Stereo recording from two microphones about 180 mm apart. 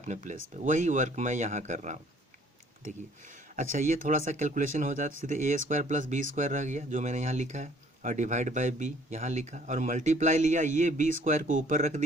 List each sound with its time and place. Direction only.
0.0 s speech: 40° right (ahead or behind)
3.5 s speech: 45° right (ahead or behind)